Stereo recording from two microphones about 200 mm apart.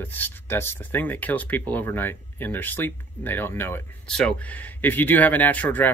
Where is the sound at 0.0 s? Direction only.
10° left (ahead or behind).